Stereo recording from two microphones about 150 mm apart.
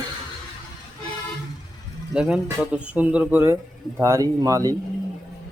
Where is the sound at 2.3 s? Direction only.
5° right (ahead or behind).